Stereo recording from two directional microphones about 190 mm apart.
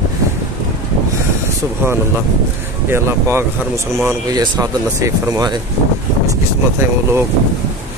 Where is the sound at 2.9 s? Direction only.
15° right (ahead or behind).